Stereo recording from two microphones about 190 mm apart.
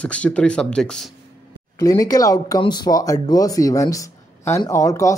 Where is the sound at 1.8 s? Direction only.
20° left (ahead or behind).